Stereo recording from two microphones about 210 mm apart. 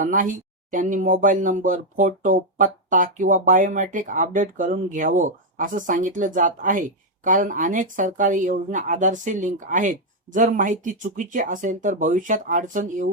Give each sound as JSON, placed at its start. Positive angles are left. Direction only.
{"t": 0.0, "sound": "speech", "side_deg": -40}